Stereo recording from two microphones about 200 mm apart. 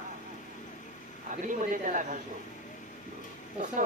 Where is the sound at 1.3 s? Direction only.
40° right (ahead or behind).